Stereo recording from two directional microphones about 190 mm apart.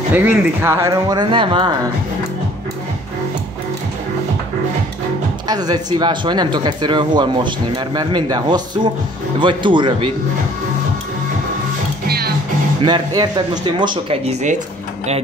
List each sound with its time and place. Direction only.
0.1 s speech: 10° right (ahead or behind); by 1.7 s 25° right (ahead or behind)
5.5 s speech: 20° right (ahead or behind)
12.1 s music: 55° right (ahead or behind)
12.8 s speech: 20° right (ahead or behind)